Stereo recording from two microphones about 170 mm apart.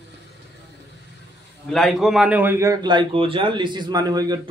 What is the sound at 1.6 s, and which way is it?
A man's voice, centre (ahead or behind).